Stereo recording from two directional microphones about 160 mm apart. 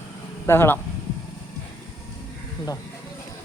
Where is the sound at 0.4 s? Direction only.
15° left (ahead or behind).